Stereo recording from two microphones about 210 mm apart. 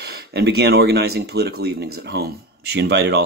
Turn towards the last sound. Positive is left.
turn(degrees=-55)  # may be behind; listen again after turning